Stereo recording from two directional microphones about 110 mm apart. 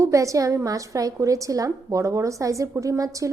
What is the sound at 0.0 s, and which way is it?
A woman's voice, 30° right (ahead or behind).